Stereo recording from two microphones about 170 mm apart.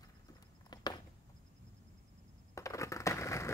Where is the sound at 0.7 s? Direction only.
25° left (ahead or behind).